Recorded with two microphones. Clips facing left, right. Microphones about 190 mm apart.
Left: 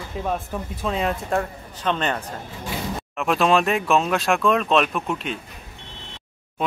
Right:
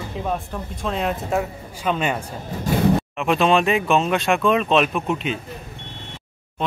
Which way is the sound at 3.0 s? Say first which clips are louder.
Right 2 dB; centre (ahead or behind).